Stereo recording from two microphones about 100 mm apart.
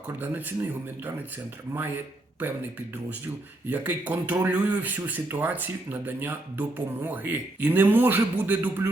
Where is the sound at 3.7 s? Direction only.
15° right (ahead or behind).